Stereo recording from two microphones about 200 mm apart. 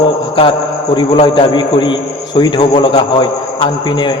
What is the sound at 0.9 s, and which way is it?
A man's voice, 25° left (ahead or behind).